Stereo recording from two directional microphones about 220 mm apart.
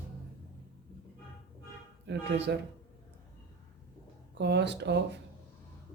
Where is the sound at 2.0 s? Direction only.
50° right (ahead or behind).